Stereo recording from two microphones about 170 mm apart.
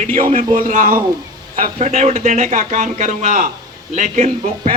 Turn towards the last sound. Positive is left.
turn(degrees=-40)  # may be behind; listen again after turning